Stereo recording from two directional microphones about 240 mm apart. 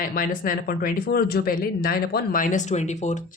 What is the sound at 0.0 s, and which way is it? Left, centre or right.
Speech, left.